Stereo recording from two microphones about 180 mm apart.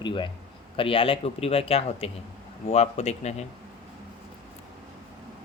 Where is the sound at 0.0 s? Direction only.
25° left (ahead or behind).